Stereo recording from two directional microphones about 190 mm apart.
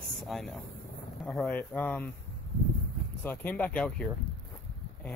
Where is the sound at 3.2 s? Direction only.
10° left (ahead or behind).